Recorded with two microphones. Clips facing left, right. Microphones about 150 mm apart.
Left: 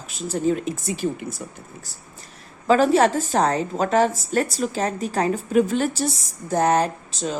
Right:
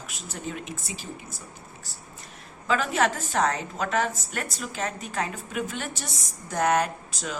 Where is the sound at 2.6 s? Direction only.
35° left (ahead or behind).